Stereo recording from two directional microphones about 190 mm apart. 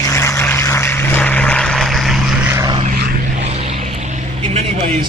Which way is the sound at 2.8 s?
50° right (ahead or behind).